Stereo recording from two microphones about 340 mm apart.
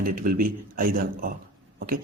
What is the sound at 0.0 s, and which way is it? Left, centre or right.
Speech, right.